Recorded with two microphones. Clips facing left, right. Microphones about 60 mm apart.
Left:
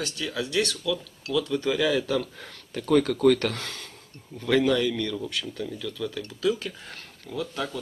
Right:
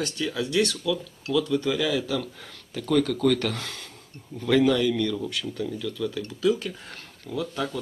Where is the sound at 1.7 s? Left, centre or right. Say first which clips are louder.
Left 1 dB; centre.